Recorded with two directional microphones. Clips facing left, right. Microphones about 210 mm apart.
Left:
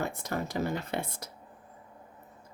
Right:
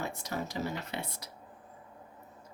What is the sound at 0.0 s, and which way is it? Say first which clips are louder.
Speech: left 3 dB; 55° left (ahead or behind).